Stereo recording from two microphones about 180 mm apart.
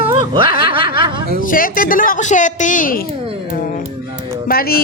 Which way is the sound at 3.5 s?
50° left (ahead or behind).